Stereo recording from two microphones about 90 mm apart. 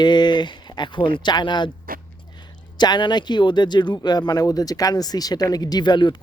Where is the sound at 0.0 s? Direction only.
55° left (ahead or behind).